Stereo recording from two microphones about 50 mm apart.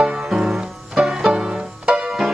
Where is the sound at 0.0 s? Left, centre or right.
Centre.